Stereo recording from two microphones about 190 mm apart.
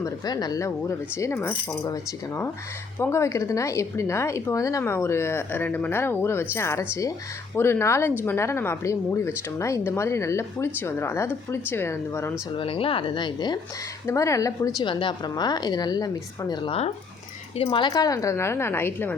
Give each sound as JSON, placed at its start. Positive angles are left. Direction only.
{"t": 0.0, "sound": "speech", "side_deg": 20}
{"t": 12.5, "sound": "a woman's voice", "side_deg": 30}